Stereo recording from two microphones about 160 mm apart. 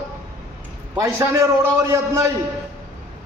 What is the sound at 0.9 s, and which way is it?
Speech, 20° right (ahead or behind).